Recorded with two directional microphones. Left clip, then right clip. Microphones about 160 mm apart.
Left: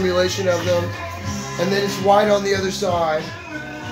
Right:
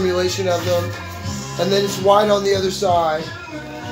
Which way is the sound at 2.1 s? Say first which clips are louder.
Right 1 dB; centre (ahead or behind).